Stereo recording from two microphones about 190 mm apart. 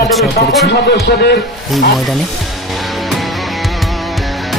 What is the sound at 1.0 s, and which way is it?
Speech, 60° left (ahead or behind).